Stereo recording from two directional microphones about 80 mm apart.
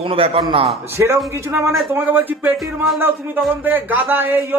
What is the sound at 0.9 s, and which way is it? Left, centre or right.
Speech, right.